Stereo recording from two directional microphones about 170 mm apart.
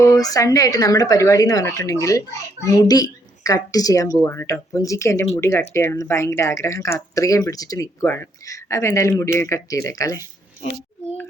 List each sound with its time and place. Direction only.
0.0 s speech: 20° left (ahead or behind)